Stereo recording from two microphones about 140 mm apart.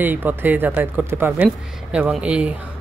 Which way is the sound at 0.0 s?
15° right (ahead or behind).